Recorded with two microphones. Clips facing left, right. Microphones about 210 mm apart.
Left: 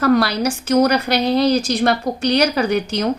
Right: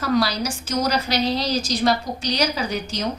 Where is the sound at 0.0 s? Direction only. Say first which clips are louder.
Left 6 dB; 60° left (ahead or behind).